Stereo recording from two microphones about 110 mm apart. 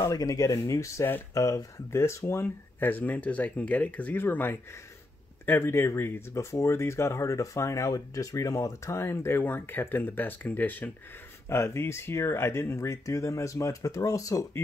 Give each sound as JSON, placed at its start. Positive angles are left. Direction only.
{"t": 0.0, "sound": "speech", "side_deg": 30}